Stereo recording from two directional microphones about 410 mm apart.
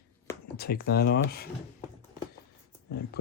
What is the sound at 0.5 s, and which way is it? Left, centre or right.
Speech, left.